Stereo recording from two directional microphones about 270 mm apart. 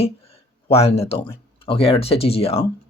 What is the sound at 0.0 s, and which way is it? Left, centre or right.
Speech, left.